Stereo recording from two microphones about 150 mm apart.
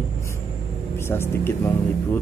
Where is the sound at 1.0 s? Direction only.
15° left (ahead or behind).